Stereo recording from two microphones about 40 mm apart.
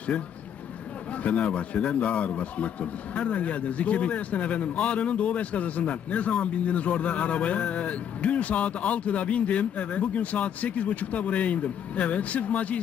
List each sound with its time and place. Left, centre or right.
0.1 s speech: left
1.2 s speech: left